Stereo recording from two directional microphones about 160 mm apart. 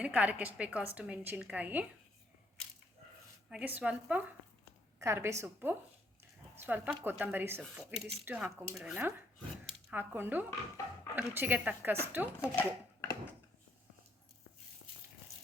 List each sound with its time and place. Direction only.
0.0 s a woman's voice: 10° right (ahead or behind)
3.5 s a woman's voice: 10° right (ahead or behind)
12.4 s speech: 15° left (ahead or behind)